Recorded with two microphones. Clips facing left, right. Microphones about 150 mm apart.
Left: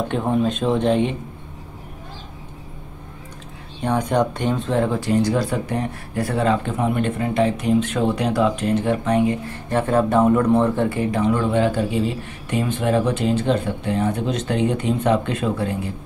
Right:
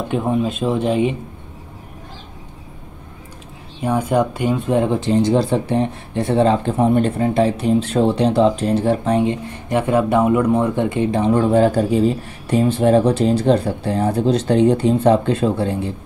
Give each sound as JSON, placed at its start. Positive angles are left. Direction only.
{"t": 0.1, "sound": "speech", "side_deg": -5}
{"t": 3.8, "sound": "speech", "side_deg": -5}